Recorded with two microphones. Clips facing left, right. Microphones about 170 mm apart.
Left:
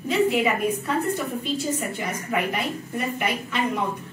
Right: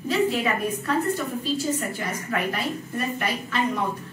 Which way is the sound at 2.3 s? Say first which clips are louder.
Left 1 dB; 20° left (ahead or behind).